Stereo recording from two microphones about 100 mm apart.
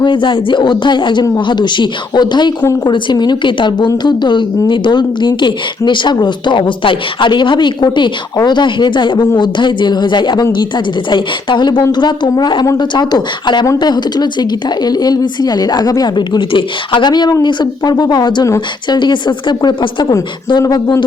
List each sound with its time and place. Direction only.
0.0 s a woman's voice: 55° left (ahead or behind)